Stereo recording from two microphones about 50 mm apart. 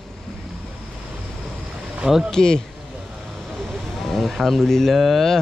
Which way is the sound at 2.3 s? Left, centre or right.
Centre.